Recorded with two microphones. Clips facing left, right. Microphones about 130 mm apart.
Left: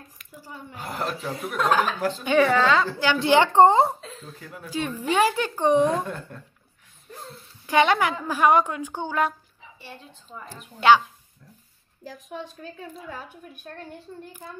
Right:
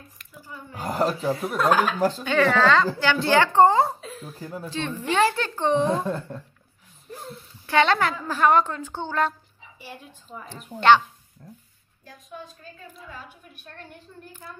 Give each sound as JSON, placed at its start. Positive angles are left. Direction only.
{"t": 0.7, "sound": "speech", "side_deg": -35}
{"t": 1.7, "sound": "a woman's voice", "side_deg": -10}
{"t": 2.0, "sound": "speech", "side_deg": -40}
{"t": 2.2, "sound": "a woman's voice", "side_deg": 10}
{"t": 4.0, "sound": "a sound", "side_deg": -10}
{"t": 4.4, "sound": "speech", "side_deg": -35}
{"t": 4.6, "sound": "a woman's voice", "side_deg": 10}
{"t": 5.8, "sound": "a woman's voice", "side_deg": -30}
{"t": 7.6, "sound": "a woman's voice", "side_deg": 15}
{"t": 9.8, "sound": "a woman's voice", "side_deg": -10}
{"t": 12.1, "sound": "a woman's voice", "side_deg": 85}